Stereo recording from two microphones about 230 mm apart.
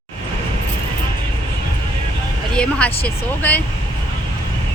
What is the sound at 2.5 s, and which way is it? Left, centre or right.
Speech, centre.